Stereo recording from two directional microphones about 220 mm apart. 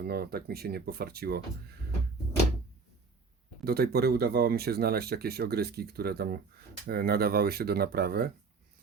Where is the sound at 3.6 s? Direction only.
45° right (ahead or behind).